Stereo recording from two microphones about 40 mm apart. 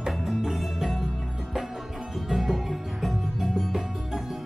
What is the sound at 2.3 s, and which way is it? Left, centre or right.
Music, centre.